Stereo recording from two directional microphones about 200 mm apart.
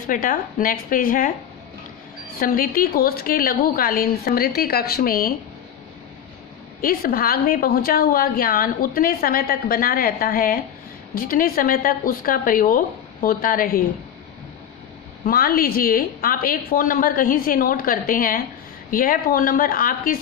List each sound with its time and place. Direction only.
0.0 s a woman's voice: 45° left (ahead or behind)
2.3 s a woman's voice: 45° left (ahead or behind)
6.8 s a woman's voice: 45° left (ahead or behind)
15.2 s a woman's voice: 45° left (ahead or behind)